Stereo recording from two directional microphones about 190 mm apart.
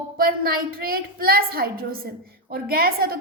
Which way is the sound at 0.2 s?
50° right (ahead or behind).